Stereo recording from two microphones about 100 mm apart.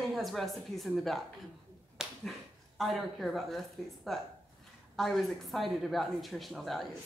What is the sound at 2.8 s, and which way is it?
Speech, centre (ahead or behind).